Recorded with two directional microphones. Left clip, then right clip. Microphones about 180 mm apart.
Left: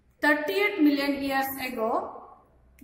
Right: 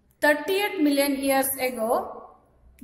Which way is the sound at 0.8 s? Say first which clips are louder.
Right 3 dB; 55° right (ahead or behind).